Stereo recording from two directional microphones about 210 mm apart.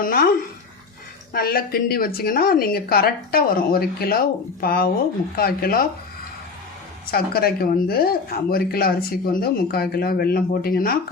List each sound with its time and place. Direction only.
0.0 s speech: 45° left (ahead or behind)
7.1 s speech: 45° left (ahead or behind)